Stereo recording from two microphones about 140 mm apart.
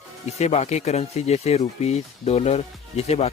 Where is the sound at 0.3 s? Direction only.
50° left (ahead or behind).